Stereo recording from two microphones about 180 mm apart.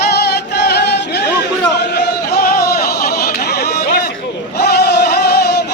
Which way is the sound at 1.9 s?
60° left (ahead or behind).